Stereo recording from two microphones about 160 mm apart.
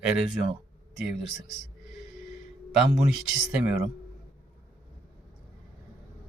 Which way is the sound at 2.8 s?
5° right (ahead or behind).